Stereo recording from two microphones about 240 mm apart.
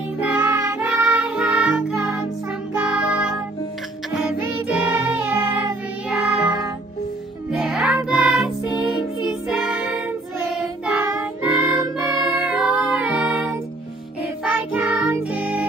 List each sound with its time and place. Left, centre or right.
0.2 s music: centre
7.5 s music: centre
10.5 s child singing: centre
12.1 s music: centre